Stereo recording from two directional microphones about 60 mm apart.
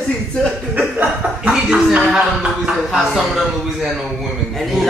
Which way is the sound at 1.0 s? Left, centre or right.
Centre.